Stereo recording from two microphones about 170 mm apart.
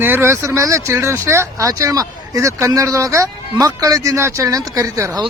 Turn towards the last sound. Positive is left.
turn(degrees=-20)  # may be behind; listen again after turning